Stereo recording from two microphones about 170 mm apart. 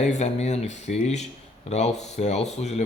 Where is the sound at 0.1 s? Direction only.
40° left (ahead or behind).